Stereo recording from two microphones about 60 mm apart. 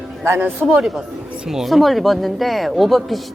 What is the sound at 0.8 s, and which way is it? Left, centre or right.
A woman's voice, centre.